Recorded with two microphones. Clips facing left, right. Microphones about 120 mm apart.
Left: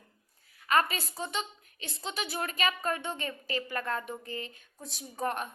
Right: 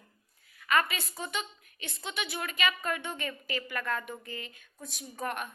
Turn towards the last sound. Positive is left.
turn(degrees=30)  # may be behind; listen again after turning